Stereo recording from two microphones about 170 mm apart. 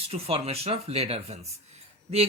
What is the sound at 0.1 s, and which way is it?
Speech, 35° right (ahead or behind).